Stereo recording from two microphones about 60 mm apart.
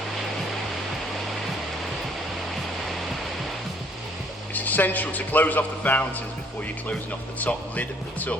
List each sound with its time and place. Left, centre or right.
4.5 s a man's voice: left
7.4 s a man's voice: left